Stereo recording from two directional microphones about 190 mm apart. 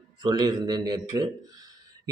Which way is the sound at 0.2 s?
20° right (ahead or behind).